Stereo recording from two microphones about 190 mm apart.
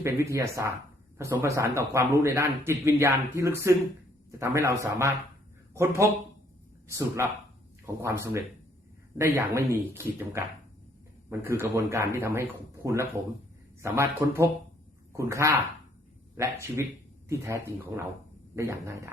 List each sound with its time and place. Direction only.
0.0 s a man's voice: 15° right (ahead or behind)